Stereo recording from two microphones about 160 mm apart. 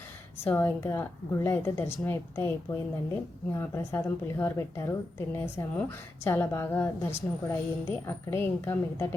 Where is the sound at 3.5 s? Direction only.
15° left (ahead or behind).